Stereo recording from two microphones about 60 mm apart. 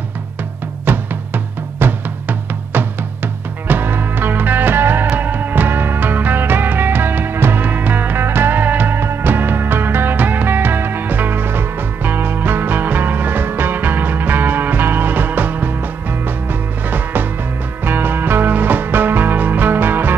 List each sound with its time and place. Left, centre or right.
0.8 s music: right
16.9 s music: right